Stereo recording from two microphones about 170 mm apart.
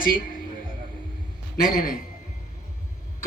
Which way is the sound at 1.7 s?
60° left (ahead or behind).